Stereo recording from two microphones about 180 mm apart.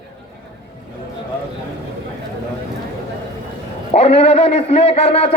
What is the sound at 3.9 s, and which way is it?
A man's voice, 35° left (ahead or behind).